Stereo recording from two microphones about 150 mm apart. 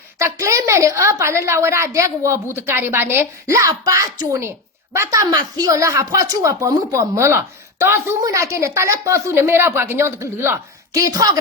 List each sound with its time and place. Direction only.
0.2 s speech: 20° right (ahead or behind)